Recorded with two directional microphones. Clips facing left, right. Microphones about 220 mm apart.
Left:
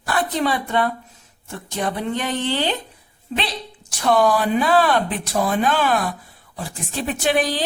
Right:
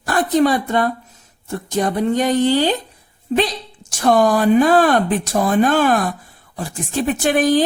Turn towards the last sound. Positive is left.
turn(degrees=-50)  # may be behind; listen again after turning